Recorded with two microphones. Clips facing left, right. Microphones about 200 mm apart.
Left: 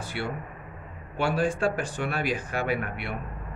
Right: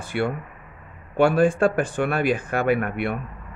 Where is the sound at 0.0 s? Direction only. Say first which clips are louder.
Right 8 dB; 55° right (ahead or behind).